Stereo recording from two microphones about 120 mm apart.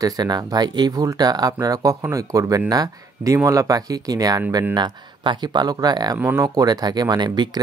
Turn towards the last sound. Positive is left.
turn(degrees=-40)  # may be behind; listen again after turning